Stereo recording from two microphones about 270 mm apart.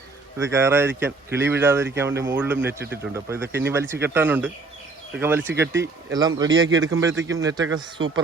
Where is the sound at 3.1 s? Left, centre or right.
Centre.